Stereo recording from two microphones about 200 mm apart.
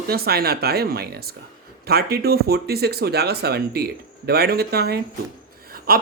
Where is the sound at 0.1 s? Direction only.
50° right (ahead or behind).